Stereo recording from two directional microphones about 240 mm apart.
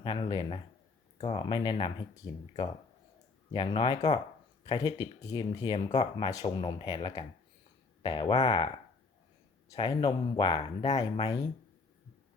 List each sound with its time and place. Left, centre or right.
0.0 s speech: centre
9.7 s speech: centre